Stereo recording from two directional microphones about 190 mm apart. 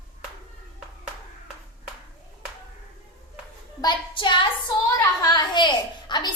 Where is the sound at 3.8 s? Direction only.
25° left (ahead or behind).